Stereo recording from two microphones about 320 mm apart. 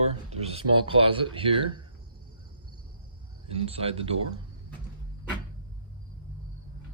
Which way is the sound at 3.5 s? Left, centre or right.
Centre.